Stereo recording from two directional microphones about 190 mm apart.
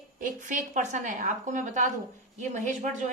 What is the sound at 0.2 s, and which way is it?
A woman's voice, 40° right (ahead or behind).